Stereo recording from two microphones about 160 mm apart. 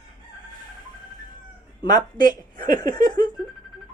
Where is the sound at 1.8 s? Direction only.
25° left (ahead or behind).